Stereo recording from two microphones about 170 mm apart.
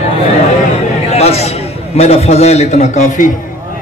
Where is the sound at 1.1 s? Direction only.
40° left (ahead or behind).